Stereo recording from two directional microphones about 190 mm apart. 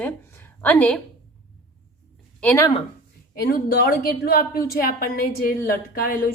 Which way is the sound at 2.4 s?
5° left (ahead or behind).